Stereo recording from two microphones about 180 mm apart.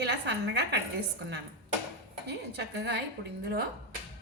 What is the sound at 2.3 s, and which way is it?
Speech, 70° right (ahead or behind).